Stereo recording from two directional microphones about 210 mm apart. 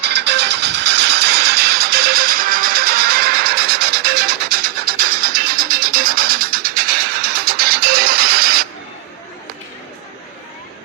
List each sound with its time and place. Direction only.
0.0 s music: 55° right (ahead or behind)